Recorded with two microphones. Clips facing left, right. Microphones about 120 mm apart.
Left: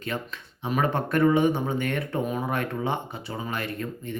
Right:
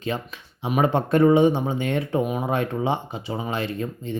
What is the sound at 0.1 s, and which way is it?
Speech, 20° right (ahead or behind).